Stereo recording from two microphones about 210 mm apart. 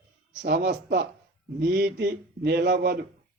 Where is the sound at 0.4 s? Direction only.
45° right (ahead or behind).